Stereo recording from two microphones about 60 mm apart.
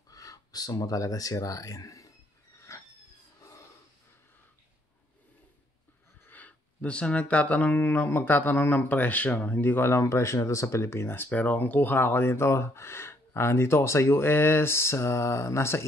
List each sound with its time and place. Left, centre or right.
0.1 s speech: left
2.7 s a sound: left
6.2 s speech: left
11.2 s speech: left